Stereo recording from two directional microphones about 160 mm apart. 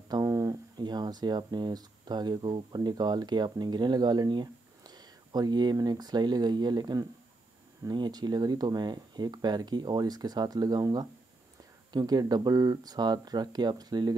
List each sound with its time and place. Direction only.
0.1 s speech: 20° right (ahead or behind)